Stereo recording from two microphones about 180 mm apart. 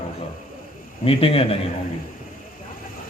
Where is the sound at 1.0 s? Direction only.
30° left (ahead or behind).